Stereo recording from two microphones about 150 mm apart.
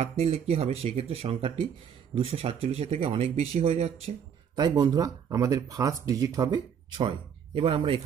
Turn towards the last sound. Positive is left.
turn(degrees=-35)  # may be behind; listen again after turning